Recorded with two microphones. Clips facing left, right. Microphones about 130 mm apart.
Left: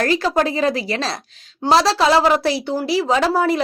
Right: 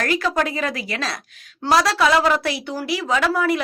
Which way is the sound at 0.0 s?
30° left (ahead or behind).